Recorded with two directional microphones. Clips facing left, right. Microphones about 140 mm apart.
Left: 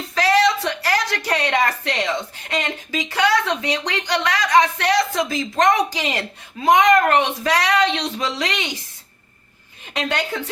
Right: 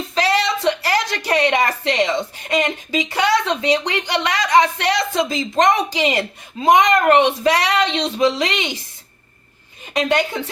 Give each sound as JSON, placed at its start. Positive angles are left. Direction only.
{"t": 0.1, "sound": "a woman's voice", "side_deg": -20}
{"t": 9.9, "sound": "a woman's voice", "side_deg": -15}